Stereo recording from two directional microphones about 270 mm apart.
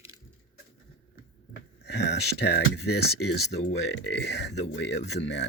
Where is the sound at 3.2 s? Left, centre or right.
Left.